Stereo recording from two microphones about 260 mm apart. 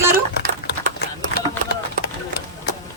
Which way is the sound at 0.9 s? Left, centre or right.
Left.